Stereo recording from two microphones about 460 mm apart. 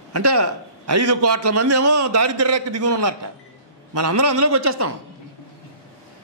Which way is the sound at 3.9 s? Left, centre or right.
Right.